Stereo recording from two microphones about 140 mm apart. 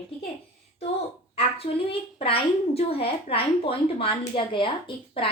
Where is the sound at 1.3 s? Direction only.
45° left (ahead or behind).